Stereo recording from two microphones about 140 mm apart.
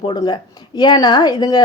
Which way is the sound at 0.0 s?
30° left (ahead or behind).